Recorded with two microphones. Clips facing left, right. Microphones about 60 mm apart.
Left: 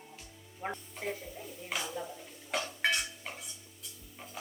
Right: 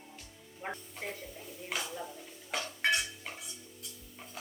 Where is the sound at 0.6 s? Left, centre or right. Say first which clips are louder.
Left 2 dB; centre.